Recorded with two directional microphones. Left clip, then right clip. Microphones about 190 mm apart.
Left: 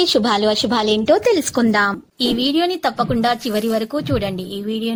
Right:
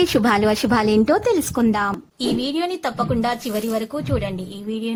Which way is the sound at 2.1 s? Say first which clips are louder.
Left 6 dB; 25° left (ahead or behind).